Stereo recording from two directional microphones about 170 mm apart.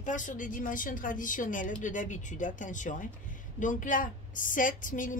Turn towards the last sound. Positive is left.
turn(degrees=50)  # may be behind; listen again after turning